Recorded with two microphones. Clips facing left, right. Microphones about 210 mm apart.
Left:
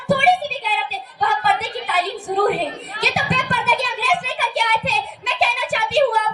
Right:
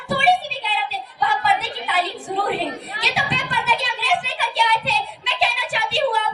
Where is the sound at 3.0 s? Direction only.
50° left (ahead or behind).